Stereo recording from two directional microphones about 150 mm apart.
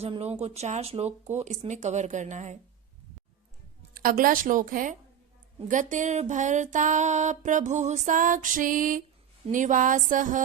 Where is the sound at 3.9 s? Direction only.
70° right (ahead or behind).